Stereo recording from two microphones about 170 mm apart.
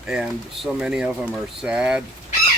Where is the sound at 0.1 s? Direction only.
5° right (ahead or behind).